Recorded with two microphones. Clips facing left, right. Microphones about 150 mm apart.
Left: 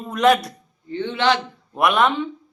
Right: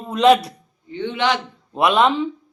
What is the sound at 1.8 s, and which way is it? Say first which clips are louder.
Speech: right 2 dB; 30° right (ahead or behind).